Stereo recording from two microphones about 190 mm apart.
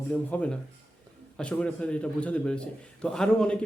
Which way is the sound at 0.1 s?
5° left (ahead or behind).